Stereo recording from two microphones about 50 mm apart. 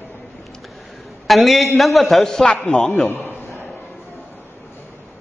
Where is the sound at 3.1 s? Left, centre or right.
Left.